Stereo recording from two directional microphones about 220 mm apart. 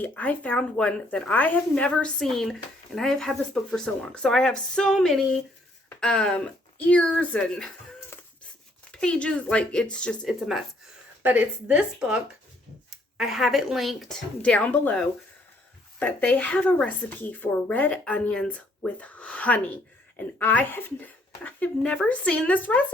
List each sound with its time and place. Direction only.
0.0 s speech: 5° left (ahead or behind)
8.1 s a sound: 10° left (ahead or behind)
8.9 s a woman's voice: 5° left (ahead or behind)